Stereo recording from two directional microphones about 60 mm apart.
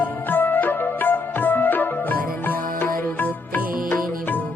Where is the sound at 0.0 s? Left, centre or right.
Left.